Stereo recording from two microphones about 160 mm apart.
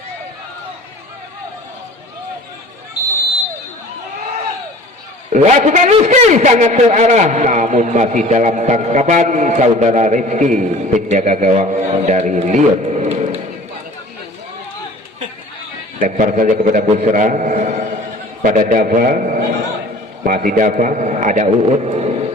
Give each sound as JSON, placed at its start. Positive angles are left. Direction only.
{"t": 5.3, "sound": "a man's voice", "side_deg": -50}
{"t": 16.0, "sound": "a man's voice", "side_deg": -50}
{"t": 16.8, "sound": "a man's voice", "side_deg": -45}